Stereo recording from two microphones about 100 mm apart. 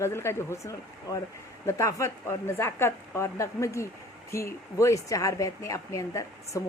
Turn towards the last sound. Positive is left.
turn(degrees=30)  # may be behind; listen again after turning